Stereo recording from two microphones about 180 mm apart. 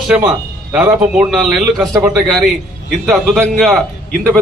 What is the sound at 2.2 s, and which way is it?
Speech, centre (ahead or behind).